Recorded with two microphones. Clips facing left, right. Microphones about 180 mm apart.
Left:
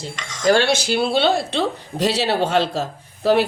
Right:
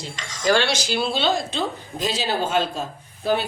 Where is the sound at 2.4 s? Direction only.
80° left.